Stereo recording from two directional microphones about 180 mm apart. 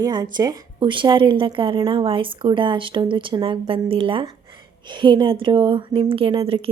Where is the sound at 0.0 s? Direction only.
25° right (ahead or behind).